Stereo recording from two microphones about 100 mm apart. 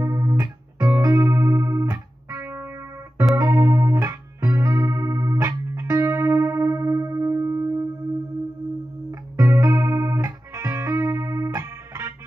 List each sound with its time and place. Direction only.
0.0 s music: 30° right (ahead or behind)
9.4 s music: 30° right (ahead or behind)